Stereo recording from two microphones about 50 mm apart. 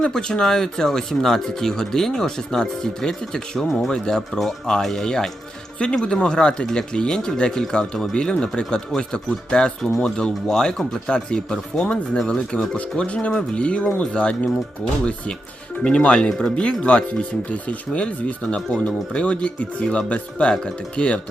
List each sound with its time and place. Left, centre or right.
0.0 s speech: centre
15.8 s speech: centre